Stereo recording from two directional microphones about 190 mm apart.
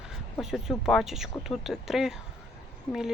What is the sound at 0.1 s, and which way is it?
Speech, centre (ahead or behind).